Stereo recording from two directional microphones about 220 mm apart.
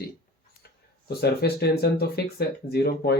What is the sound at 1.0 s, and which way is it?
Speech, 45° left (ahead or behind).